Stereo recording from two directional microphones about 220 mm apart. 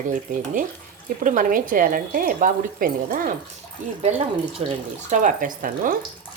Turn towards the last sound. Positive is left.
turn(degrees=-40)  # may be behind; listen again after turning